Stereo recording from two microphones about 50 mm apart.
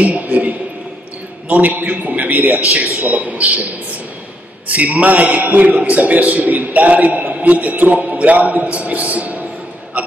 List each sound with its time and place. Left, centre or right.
0.0 s a sound: right
1.5 s a man's voice: right
4.6 s a man's voice: right
9.9 s hiccup: right